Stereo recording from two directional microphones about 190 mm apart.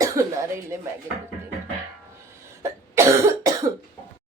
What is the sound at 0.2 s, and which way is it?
Cough, 15° right (ahead or behind).